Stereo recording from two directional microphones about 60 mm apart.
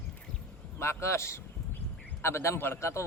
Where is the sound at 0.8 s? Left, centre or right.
Left.